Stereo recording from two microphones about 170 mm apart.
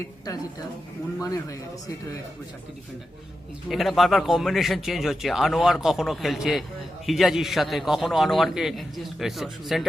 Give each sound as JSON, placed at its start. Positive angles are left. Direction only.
{"t": 1.2, "sound": "speech", "side_deg": 20}
{"t": 3.7, "sound": "a man's voice", "side_deg": 0}